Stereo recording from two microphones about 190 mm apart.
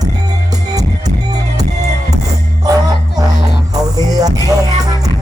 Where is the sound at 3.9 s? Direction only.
20° right (ahead or behind).